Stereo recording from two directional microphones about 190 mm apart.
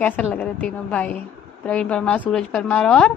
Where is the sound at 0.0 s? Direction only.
5° left (ahead or behind).